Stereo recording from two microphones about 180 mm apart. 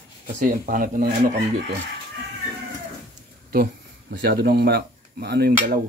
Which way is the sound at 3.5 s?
60° right (ahead or behind).